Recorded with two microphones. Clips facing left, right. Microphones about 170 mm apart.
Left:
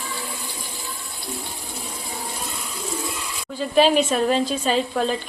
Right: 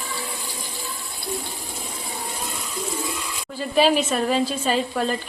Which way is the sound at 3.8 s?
5° right (ahead or behind).